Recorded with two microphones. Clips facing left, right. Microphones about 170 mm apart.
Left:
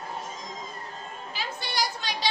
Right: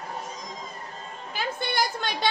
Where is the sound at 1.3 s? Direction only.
50° right (ahead or behind).